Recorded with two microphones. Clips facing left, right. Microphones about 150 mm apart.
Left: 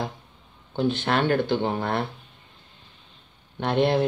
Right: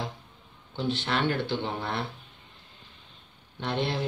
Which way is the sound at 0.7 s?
55° left (ahead or behind).